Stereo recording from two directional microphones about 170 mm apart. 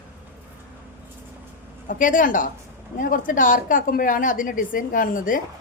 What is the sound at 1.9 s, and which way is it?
A woman's voice, 50° left (ahead or behind).